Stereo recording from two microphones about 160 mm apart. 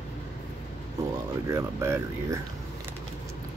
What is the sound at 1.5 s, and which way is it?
Speech, 15° right (ahead or behind).